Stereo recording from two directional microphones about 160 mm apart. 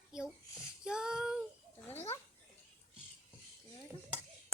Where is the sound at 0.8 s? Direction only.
5° right (ahead or behind).